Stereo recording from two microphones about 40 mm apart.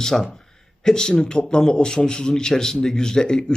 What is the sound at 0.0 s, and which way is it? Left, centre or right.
A man's voice, centre.